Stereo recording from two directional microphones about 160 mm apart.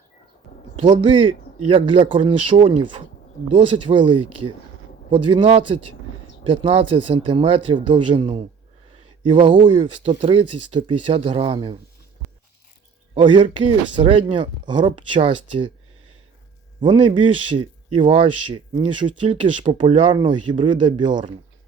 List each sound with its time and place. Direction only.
0.8 s speech: 30° right (ahead or behind)
13.1 s speech: 30° right (ahead or behind)
16.8 s speech: 30° right (ahead or behind)